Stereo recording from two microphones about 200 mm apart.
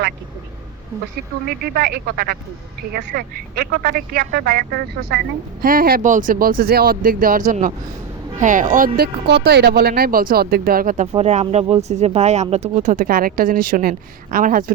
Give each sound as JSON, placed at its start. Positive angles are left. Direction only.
{"t": 1.5, "sound": "speech", "side_deg": -50}